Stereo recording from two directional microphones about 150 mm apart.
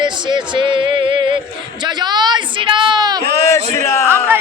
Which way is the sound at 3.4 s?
20° left (ahead or behind).